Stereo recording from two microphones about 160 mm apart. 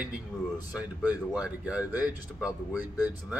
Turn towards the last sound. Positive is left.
turn(degrees=-10)  # may be behind; listen again after turning